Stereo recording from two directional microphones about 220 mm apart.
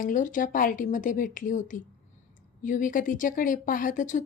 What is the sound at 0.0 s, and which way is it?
Speech, 35° left (ahead or behind).